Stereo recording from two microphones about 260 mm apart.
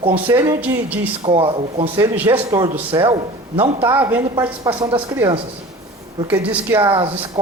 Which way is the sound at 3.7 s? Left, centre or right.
Centre.